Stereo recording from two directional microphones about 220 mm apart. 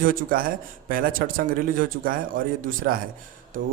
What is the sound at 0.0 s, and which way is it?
A man's voice, 40° right (ahead or behind).